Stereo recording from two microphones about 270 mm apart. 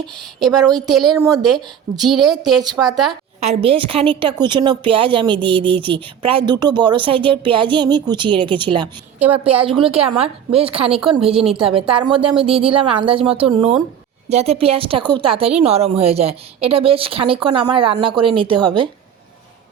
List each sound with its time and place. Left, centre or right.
1.2 s a woman's voice: centre
2.0 s a woman's voice: centre
2.6 s a woman's voice: centre
9.1 s a woman's voice: centre
9.6 s a woman's voice: centre